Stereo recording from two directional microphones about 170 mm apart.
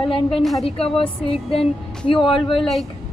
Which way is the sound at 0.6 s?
35° left (ahead or behind).